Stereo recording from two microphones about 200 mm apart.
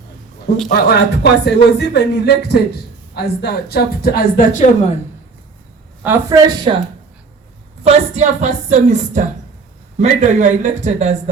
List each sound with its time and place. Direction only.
0.7 s speech: 55° left (ahead or behind)
6.0 s speech: 15° right (ahead or behind)
7.9 s speech: 35° right (ahead or behind)